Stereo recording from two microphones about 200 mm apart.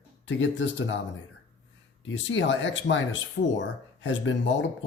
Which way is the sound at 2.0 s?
65° left (ahead or behind).